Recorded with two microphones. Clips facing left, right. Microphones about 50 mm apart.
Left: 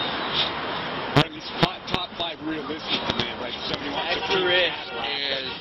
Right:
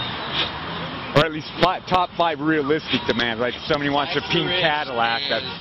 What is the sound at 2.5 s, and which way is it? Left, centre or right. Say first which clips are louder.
Speech: right 9 dB; right.